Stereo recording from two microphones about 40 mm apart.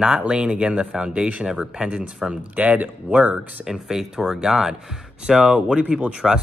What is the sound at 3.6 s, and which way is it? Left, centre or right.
Speech, centre.